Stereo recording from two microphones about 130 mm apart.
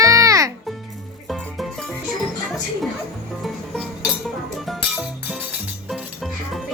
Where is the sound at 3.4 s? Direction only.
Centre (ahead or behind).